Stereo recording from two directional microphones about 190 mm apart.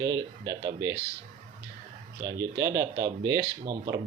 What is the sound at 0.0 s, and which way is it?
Speech, 20° right (ahead or behind).